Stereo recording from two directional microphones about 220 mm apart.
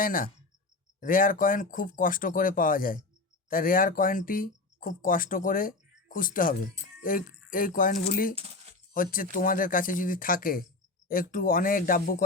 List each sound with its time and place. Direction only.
0.0 s speech: 40° left (ahead or behind)